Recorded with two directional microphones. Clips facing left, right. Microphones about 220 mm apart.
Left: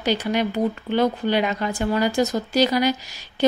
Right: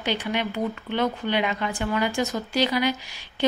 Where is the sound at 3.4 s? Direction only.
40° left (ahead or behind).